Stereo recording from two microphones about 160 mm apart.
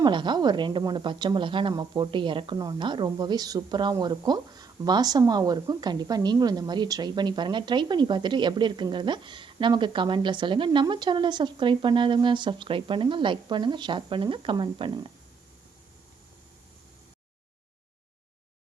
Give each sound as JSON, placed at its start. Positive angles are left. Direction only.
{"t": 0.0, "sound": "a woman's voice", "side_deg": -30}